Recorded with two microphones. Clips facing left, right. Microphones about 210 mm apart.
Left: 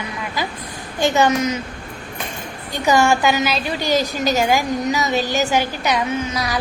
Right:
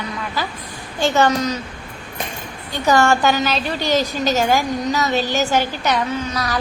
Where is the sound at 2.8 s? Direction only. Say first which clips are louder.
Even; 15° left (ahead or behind).